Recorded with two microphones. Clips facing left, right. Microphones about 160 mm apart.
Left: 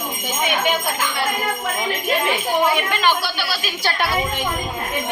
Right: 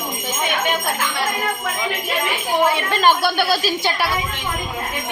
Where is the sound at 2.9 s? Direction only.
40° right (ahead or behind).